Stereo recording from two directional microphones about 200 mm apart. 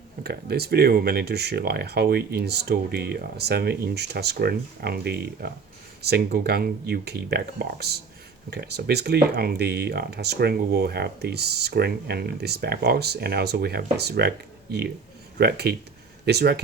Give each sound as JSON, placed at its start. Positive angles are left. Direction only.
{"t": 0.2, "sound": "speech", "side_deg": -50}